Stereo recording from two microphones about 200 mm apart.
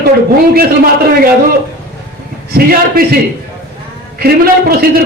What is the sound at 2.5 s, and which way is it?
Speech, 50° right (ahead or behind).